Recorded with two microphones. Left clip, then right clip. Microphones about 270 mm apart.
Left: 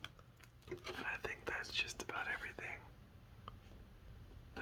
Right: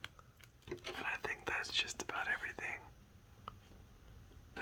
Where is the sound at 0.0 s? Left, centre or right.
Centre.